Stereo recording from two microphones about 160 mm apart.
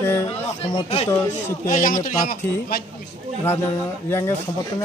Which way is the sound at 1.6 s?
55° left (ahead or behind).